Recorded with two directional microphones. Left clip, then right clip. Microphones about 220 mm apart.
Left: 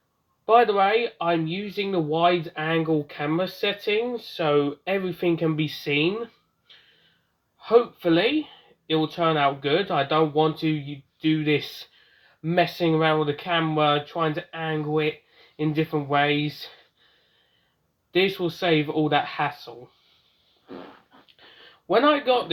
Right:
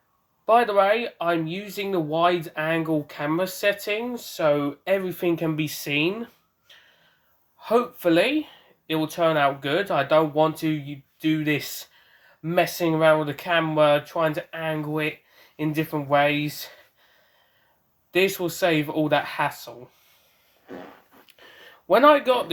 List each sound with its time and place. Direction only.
0.4 s a woman's voice: 10° right (ahead or behind)
18.1 s speech: 20° right (ahead or behind)
21.8 s a woman's voice: 25° right (ahead or behind)